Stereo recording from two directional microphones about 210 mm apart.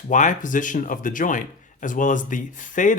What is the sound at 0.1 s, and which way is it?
Speech, 35° left (ahead or behind).